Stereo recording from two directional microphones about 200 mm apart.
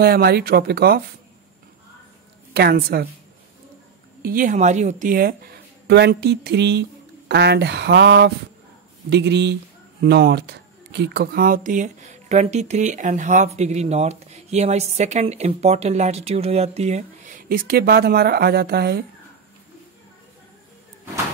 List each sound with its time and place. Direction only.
0.0 s speech: 50° right (ahead or behind)
2.5 s speech: 50° right (ahead or behind)
4.2 s a woman's voice: 45° right (ahead or behind)